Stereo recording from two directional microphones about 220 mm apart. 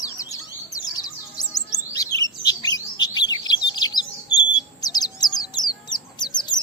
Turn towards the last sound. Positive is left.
turn(degrees=20)  # may be behind; listen again after turning